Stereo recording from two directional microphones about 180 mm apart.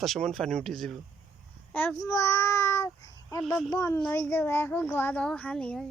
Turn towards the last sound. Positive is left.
turn(degrees=5)  # may be behind; listen again after turning